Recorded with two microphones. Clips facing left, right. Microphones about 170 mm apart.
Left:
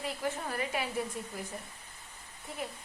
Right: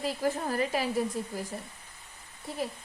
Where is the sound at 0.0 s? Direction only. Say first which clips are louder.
Right 5 dB; 35° right (ahead or behind).